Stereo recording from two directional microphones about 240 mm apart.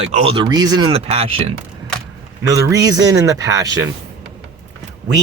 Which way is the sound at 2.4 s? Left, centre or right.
Centre.